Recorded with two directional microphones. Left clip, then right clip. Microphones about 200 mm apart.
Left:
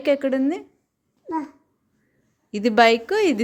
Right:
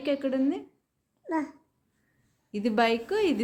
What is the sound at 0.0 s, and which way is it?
Speech, 35° left (ahead or behind).